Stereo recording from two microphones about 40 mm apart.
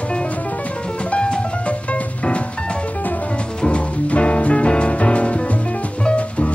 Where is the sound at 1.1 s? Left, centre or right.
Left.